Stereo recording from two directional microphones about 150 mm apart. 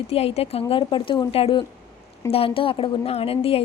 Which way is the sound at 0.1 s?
45° left (ahead or behind).